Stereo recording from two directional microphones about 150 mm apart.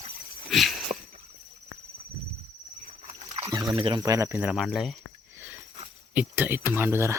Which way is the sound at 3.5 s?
25° right (ahead or behind).